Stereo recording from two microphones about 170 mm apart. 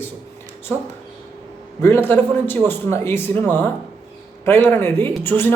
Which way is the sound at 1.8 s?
15° left (ahead or behind).